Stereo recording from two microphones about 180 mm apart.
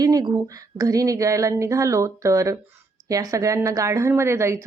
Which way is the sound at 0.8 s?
20° right (ahead or behind).